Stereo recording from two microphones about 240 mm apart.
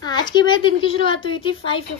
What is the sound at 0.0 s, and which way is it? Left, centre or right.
A child's voice, centre.